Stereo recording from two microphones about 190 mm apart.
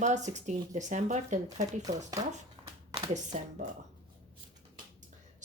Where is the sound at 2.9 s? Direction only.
30° right (ahead or behind).